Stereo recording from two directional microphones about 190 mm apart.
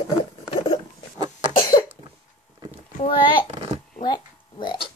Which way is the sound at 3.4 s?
35° right (ahead or behind).